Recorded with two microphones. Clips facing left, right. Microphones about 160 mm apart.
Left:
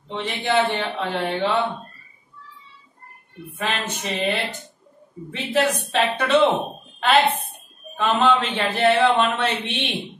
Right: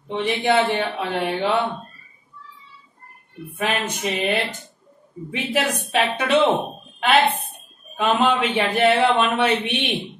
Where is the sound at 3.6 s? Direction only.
15° right (ahead or behind).